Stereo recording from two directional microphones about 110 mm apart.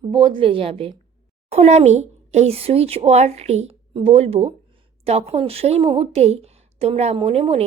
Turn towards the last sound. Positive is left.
turn(degrees=-65)  # may be behind; listen again after turning